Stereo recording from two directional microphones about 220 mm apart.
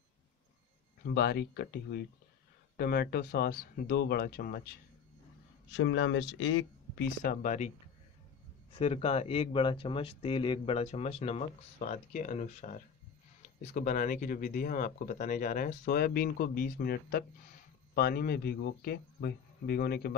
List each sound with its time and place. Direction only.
1.0 s a man's voice: 45° left (ahead or behind)
5.7 s speech: 60° left (ahead or behind)
7.2 s speech: 35° left (ahead or behind)
8.7 s a man's voice: 25° left (ahead or behind); by 20.2 s 45° left (ahead or behind)